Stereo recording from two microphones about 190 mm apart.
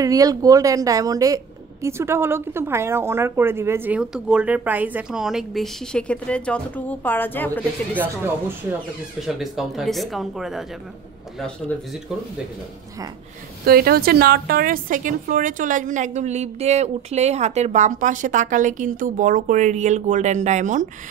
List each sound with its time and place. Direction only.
0.0 s a woman's voice: 20° right (ahead or behind); by 8.1 s 10° left (ahead or behind)
9.2 s speech: centre (ahead or behind)
13.7 s a woman's voice: 55° right (ahead or behind)